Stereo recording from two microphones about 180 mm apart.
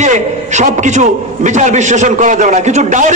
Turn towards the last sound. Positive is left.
turn(degrees=-40)  # may be behind; listen again after turning